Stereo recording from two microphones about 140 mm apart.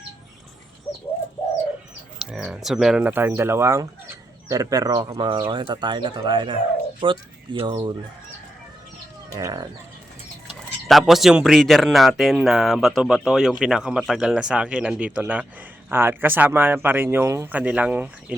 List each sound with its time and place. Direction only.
2.1 s speech: 5° right (ahead or behind); by 7.9 s 35° right (ahead or behind)
9.3 s speech: 25° right (ahead or behind)
10.8 s speech: centre (ahead or behind); by 17.6 s 20° right (ahead or behind)
17.6 s speech: 10° right (ahead or behind)